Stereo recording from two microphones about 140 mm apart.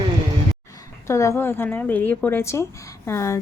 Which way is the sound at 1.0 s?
20° left (ahead or behind).